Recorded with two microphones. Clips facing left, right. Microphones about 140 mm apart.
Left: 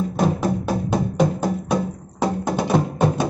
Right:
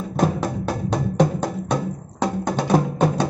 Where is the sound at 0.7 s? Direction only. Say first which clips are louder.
Left 2 dB; 10° left (ahead or behind).